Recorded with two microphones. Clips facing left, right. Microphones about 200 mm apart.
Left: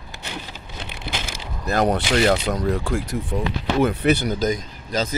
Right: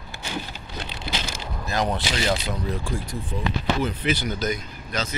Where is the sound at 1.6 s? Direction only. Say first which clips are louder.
Left 6 dB; 50° left (ahead or behind).